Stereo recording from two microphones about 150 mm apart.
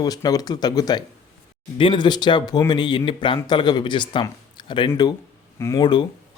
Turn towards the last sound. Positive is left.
turn(degrees=30)  # may be behind; listen again after turning